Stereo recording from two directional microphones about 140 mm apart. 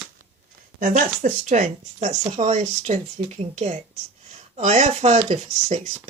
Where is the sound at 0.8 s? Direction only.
65° right (ahead or behind).